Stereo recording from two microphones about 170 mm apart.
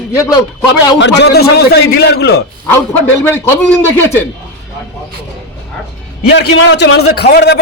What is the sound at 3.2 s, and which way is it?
A man's voice, 15° left (ahead or behind).